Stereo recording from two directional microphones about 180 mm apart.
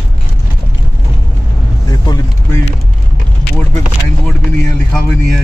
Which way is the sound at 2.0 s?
20° left (ahead or behind).